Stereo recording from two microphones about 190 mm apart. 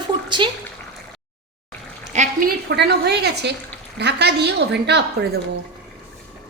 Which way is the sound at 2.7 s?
60° right (ahead or behind).